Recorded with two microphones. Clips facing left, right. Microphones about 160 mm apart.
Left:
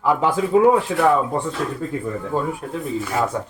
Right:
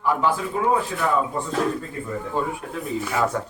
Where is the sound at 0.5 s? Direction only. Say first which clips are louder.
Left 10 dB; 90° left.